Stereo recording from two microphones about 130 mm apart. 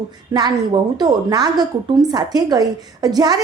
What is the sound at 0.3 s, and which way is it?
A woman's voice, 30° right (ahead or behind).